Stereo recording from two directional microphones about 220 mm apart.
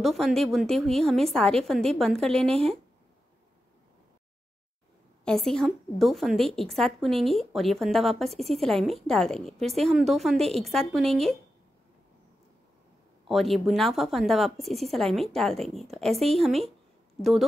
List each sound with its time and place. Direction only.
0.0 s speech: centre (ahead or behind)
5.2 s speech: centre (ahead or behind)
13.3 s speech: centre (ahead or behind)